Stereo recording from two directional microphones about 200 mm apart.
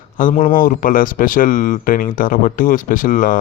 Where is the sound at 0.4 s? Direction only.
45° left (ahead or behind).